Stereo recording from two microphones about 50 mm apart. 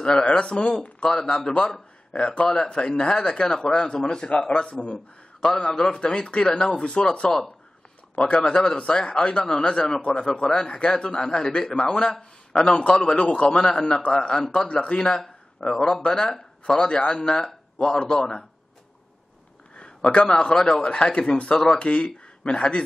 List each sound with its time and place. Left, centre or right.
0.0 s a man's voice: centre
15.0 s a man's voice: centre
19.8 s a man's voice: left